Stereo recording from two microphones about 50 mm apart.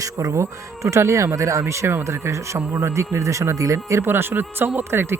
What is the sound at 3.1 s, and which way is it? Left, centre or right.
Speech, right.